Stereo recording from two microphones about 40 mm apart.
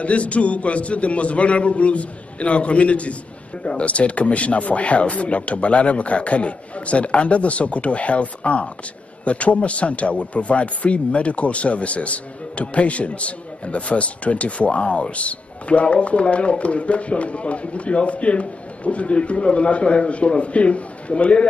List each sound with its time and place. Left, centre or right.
0.0 s a man's voice: left